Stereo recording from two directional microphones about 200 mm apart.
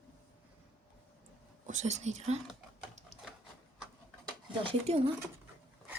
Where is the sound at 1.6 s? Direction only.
35° right (ahead or behind).